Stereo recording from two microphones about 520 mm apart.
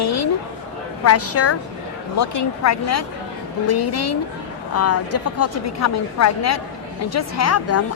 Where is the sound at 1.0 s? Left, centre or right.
Left.